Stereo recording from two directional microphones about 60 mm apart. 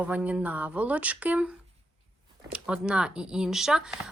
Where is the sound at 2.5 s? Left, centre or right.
Centre.